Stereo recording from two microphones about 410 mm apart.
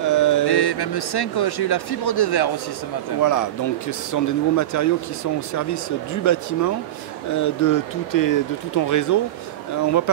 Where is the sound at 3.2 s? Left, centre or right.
Left.